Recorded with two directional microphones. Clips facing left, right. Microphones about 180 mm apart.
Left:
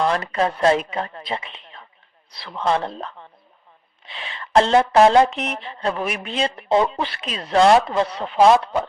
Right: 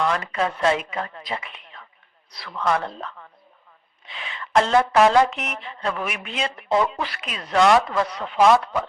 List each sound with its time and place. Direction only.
0.0 s speech: 35° left (ahead or behind)